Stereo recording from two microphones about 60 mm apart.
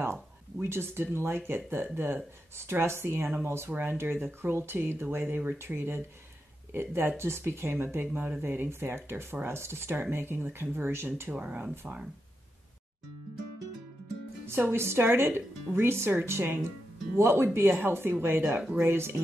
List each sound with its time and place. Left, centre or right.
0.0 s a sound: right
1.1 s speech: right
11.3 s speech: right
14.4 s speech: right